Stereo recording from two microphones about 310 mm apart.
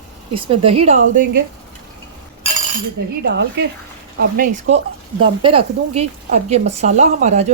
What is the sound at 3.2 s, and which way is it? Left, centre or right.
Speech, right.